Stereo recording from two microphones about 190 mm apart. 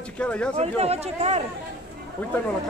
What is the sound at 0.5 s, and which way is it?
Speech, 35° right (ahead or behind).